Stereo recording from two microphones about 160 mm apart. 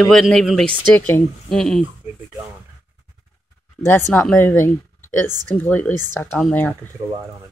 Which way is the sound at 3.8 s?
15° left (ahead or behind).